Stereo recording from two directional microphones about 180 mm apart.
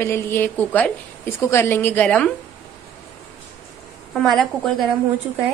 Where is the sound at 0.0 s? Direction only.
15° left (ahead or behind).